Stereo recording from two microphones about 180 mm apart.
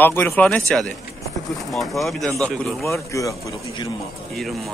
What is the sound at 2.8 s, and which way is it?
A man's voice, 15° left (ahead or behind).